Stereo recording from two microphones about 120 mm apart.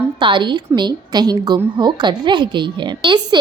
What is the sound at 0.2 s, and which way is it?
A woman's voice, 40° right (ahead or behind).